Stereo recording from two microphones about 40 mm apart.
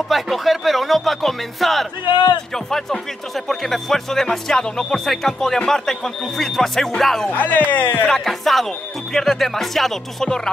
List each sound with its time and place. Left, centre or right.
0.1 s speech: centre
7.2 s speech: left
8.1 s speech: centre